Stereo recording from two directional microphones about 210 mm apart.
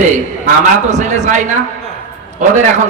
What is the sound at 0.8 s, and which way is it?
Speech, 35° right (ahead or behind).